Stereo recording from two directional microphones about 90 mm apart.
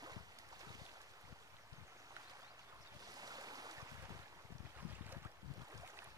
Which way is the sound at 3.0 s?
45° right (ahead or behind).